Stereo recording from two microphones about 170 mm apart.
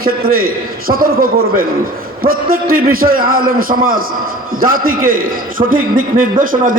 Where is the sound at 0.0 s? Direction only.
60° right (ahead or behind).